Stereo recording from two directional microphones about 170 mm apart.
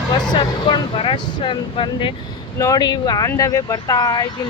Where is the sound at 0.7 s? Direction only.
30° left (ahead or behind).